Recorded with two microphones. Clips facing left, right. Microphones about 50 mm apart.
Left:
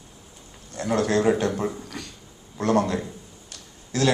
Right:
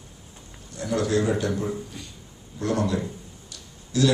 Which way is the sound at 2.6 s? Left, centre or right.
Left.